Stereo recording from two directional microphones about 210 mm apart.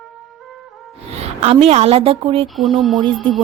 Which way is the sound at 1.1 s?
30° right (ahead or behind).